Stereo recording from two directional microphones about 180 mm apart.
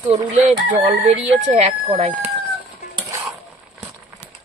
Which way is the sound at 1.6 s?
35° right (ahead or behind).